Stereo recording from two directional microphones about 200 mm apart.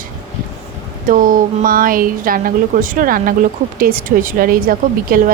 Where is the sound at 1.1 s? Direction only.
40° right (ahead or behind).